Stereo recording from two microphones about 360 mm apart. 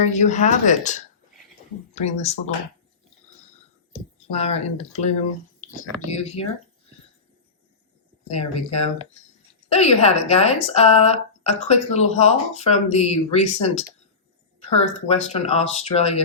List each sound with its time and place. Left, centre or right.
0.0 s a woman's voice: centre
4.3 s speech: centre
8.3 s speech: centre